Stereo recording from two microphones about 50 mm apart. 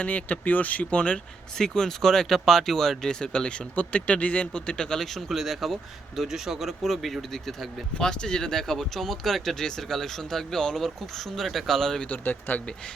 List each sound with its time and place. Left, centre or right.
0.0 s speech: left
1.5 s speech: centre
7.9 s speech: centre
12.0 s speech: left